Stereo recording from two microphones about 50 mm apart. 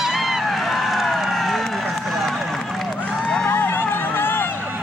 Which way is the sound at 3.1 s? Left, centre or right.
Centre.